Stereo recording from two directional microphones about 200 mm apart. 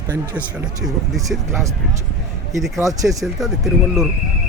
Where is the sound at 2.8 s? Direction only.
15° right (ahead or behind).